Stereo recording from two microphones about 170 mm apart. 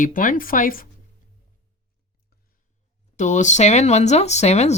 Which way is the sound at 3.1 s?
45° left (ahead or behind).